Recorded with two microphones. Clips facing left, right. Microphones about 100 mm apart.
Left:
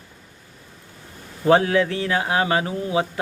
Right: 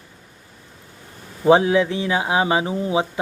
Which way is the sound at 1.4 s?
15° right (ahead or behind).